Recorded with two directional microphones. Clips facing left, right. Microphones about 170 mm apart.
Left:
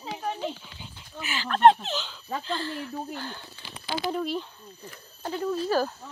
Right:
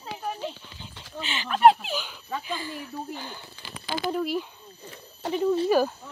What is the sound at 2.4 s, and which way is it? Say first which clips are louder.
Speech: left 2 dB; 10° right (ahead or behind).